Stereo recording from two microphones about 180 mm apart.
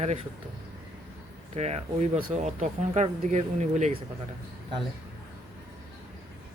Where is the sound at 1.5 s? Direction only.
40° right (ahead or behind).